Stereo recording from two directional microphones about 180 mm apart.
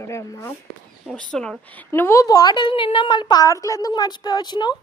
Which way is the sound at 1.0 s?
5° left (ahead or behind).